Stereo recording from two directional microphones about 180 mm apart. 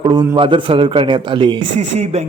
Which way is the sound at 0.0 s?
20° right (ahead or behind).